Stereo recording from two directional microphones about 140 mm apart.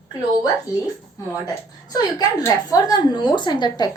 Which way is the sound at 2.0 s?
25° left (ahead or behind).